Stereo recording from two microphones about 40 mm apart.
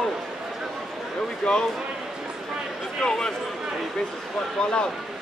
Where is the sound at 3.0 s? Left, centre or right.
Centre.